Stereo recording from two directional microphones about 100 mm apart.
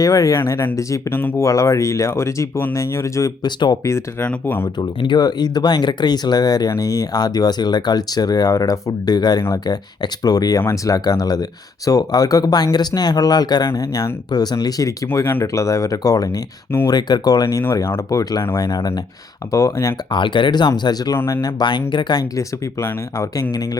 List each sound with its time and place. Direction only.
0.0 s speech: 35° left (ahead or behind)
1.5 s speech: 35° left (ahead or behind)
3.4 s speech: 45° left (ahead or behind)
4.2 s speech: 15° left (ahead or behind)
4.8 s speech: 50° left (ahead or behind)
13.7 s speech: 35° left (ahead or behind)
15.0 s speech: 25° left (ahead or behind)
20.1 s speech: 55° left (ahead or behind)